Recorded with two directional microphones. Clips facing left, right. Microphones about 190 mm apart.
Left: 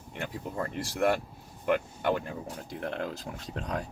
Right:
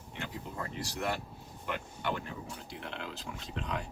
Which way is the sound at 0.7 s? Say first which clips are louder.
Left 9 dB; 55° left (ahead or behind).